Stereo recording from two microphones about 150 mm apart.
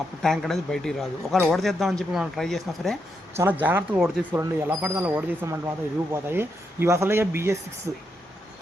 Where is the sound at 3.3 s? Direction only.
15° right (ahead or behind).